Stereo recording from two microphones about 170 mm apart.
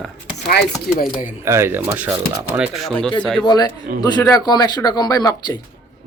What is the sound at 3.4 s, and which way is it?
Speech, 25° left (ahead or behind).